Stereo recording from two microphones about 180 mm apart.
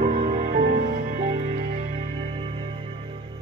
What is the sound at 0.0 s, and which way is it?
Music, 45° right (ahead or behind).